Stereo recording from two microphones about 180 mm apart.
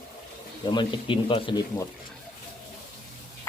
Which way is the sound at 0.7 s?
25° left (ahead or behind).